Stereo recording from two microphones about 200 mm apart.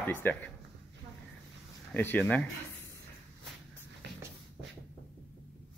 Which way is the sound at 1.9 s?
10° left (ahead or behind).